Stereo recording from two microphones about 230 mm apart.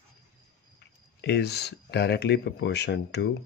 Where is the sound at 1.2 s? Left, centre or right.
Left.